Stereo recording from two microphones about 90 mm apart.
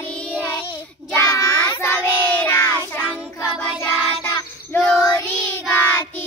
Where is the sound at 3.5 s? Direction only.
10° left (ahead or behind).